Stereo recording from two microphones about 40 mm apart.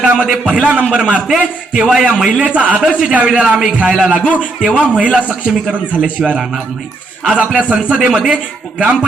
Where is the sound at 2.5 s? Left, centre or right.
Right; by 4.0 s centre.